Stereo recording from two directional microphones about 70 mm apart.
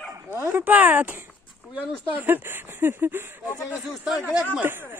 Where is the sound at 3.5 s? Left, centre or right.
Left.